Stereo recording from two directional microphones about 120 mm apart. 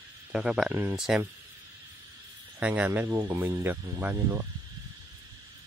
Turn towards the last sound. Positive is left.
turn(degrees=-15)  # may be behind; listen again after turning